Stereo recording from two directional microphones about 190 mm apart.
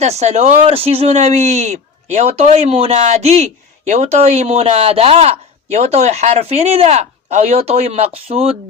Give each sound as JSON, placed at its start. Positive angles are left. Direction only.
{"t": 0.0, "sound": "speech", "side_deg": -35}